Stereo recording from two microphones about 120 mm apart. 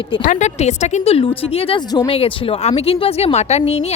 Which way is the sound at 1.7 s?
35° left (ahead or behind).